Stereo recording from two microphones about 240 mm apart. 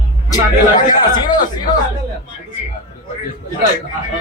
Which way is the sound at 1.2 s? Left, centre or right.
Centre.